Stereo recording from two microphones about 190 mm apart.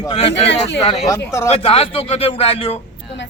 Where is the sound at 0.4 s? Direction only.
70° left (ahead or behind).